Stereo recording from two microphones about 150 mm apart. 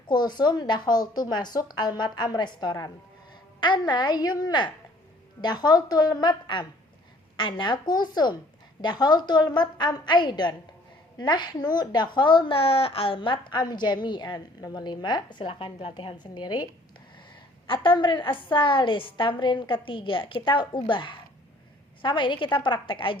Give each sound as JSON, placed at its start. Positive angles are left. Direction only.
{"t": 0.1, "sound": "a woman's voice", "side_deg": 30}
{"t": 17.7, "sound": "a woman's voice", "side_deg": 35}